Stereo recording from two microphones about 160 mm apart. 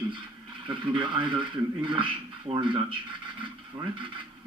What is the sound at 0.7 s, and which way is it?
A man's voice, 30° right (ahead or behind).